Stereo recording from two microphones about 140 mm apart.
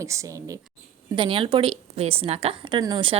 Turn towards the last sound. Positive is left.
turn(degrees=-35)  # may be behind; listen again after turning